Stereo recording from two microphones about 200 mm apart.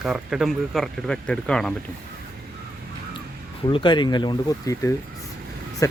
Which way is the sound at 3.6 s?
25° left (ahead or behind).